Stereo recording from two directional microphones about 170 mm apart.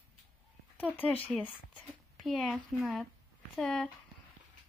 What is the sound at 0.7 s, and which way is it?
A child's voice, 10° left (ahead or behind).